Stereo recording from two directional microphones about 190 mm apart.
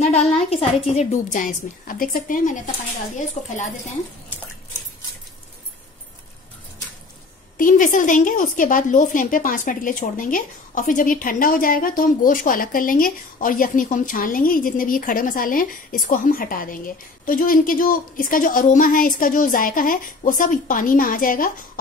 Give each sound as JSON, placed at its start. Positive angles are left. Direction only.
{"t": 0.0, "sound": "a woman's voice", "side_deg": 35}
{"t": 1.3, "sound": "a woman's voice", "side_deg": 45}
{"t": 7.5, "sound": "a woman's voice", "side_deg": 45}